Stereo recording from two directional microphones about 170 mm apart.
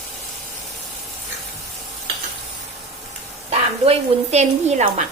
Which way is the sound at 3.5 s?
35° right (ahead or behind).